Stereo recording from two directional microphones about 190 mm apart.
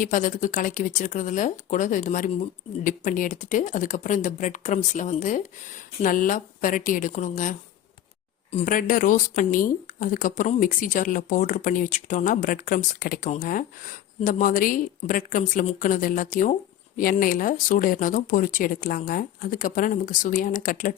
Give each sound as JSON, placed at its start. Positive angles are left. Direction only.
{"t": 0.0, "sound": "speech", "side_deg": 45}
{"t": 8.5, "sound": "speech", "side_deg": 45}